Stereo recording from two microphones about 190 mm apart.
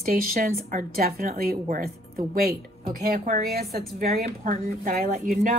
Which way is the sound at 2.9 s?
55° right (ahead or behind).